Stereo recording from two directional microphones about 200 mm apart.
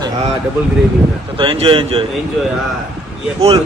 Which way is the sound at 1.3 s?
25° right (ahead or behind).